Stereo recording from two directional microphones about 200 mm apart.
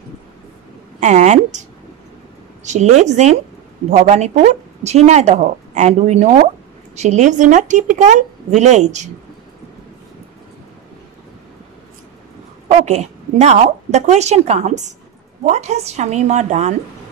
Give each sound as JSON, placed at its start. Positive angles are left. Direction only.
{"t": 1.0, "sound": "a woman's voice", "side_deg": -35}
{"t": 12.6, "sound": "a woman's voice", "side_deg": -35}